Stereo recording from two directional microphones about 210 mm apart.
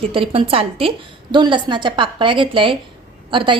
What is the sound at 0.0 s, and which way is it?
A woman's voice, 25° right (ahead or behind).